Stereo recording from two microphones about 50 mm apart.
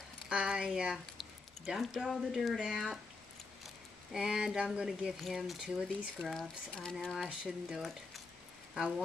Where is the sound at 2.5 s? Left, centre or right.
Centre.